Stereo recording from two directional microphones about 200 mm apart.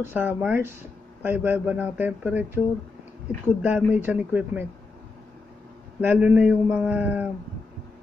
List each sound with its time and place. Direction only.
0.1 s speech: 10° right (ahead or behind)
3.6 s speech: 10° right (ahead or behind)
5.9 s speech: 5° right (ahead or behind)